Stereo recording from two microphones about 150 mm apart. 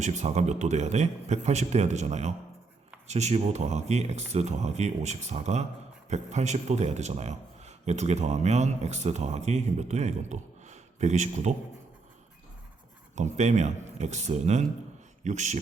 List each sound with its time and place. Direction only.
0.0 s a man's voice: 50° right (ahead or behind)
13.1 s a man's voice: 50° right (ahead or behind)